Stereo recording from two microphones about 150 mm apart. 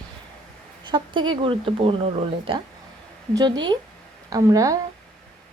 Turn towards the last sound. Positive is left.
turn(degrees=-25)  # may be behind; listen again after turning